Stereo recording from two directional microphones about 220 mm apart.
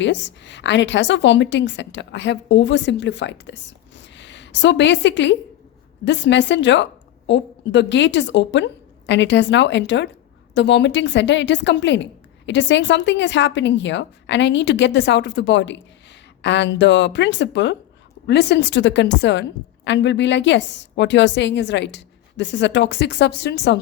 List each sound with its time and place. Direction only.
0.0 s a woman's voice: 55° left (ahead or behind)